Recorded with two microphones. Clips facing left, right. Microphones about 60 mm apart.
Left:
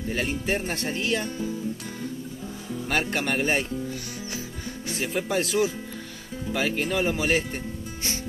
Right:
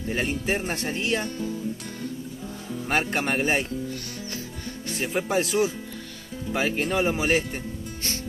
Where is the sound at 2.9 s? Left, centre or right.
Centre.